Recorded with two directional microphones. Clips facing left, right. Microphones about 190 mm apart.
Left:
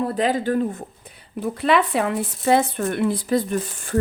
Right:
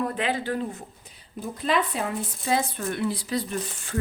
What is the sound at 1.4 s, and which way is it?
Speech, 70° left (ahead or behind).